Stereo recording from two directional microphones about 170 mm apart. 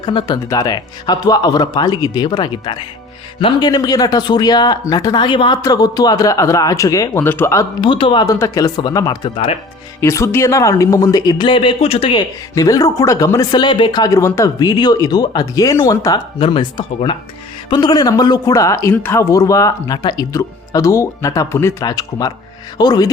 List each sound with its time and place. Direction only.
0.0 s speech: 30° left (ahead or behind)
7.9 s speech: 30° left (ahead or behind)
9.3 s speech: 35° left (ahead or behind)
10.0 s speech: 15° left (ahead or behind); by 12.2 s 35° left (ahead or behind)
12.5 s speech: 20° left (ahead or behind)